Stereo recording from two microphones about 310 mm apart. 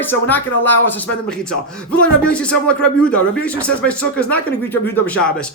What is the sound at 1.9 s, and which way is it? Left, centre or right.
A man's voice, centre.